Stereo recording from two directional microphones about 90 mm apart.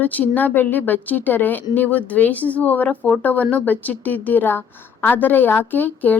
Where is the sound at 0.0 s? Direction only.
20° left (ahead or behind).